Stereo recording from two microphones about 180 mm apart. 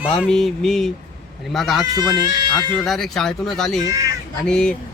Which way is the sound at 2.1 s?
25° right (ahead or behind).